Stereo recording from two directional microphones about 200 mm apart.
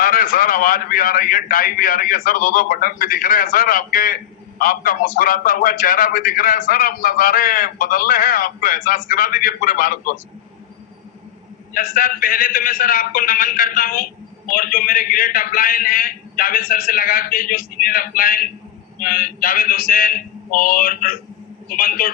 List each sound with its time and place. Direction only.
0.0 s a man's voice: 45° left (ahead or behind)
11.7 s a man's voice: 45° left (ahead or behind)